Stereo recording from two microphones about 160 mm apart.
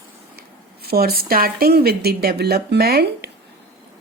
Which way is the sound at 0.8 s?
75° right (ahead or behind).